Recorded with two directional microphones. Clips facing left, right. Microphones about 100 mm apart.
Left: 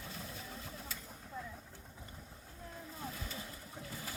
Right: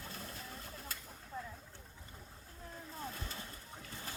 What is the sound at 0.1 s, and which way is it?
Vehicle, centre (ahead or behind).